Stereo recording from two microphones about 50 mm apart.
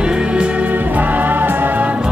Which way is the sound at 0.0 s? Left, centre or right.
Centre.